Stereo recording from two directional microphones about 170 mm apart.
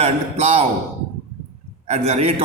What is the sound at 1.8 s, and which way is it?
Speech, 40° right (ahead or behind).